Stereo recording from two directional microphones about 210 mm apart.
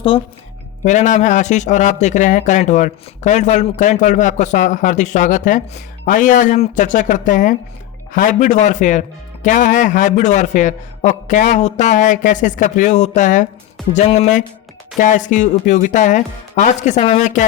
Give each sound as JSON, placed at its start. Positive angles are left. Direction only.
{"t": 0.1, "sound": "speech", "side_deg": 25}